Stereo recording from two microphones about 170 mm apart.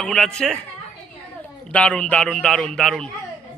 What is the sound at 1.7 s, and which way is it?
A man's voice, 5° left (ahead or behind).